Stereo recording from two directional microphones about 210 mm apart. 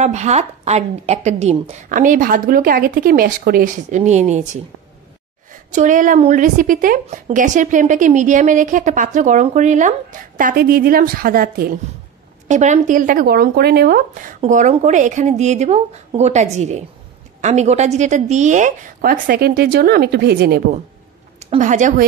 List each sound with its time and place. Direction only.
0.0 s a woman's voice: 30° right (ahead or behind)
5.8 s a woman's voice: 40° right (ahead or behind)
14.4 s a woman's voice: 35° right (ahead or behind); by 20.6 s 50° right (ahead or behind)
21.4 s a woman's voice: 35° right (ahead or behind)